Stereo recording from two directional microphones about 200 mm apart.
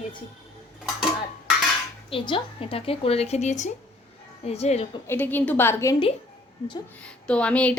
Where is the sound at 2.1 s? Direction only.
25° left (ahead or behind).